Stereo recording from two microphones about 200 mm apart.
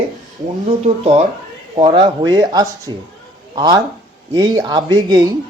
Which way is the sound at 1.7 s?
25° right (ahead or behind).